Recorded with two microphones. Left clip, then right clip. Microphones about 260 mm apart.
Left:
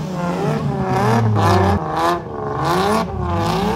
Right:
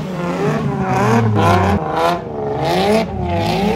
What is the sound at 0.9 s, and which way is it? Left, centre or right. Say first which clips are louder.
Vehicle: right 2 dB; left.